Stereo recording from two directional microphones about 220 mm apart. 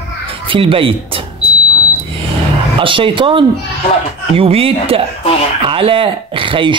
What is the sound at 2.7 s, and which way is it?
Speech, 25° right (ahead or behind).